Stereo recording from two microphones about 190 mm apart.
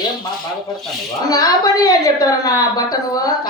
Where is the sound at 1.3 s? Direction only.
20° left (ahead or behind).